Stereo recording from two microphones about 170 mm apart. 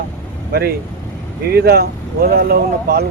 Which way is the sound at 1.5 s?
65° right (ahead or behind).